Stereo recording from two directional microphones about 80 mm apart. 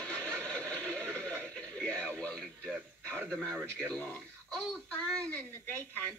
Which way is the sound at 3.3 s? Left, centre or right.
Centre.